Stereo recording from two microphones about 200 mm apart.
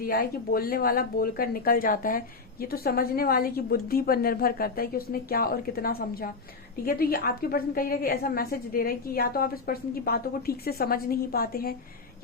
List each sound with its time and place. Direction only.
0.0 s speech: 50° left (ahead or behind)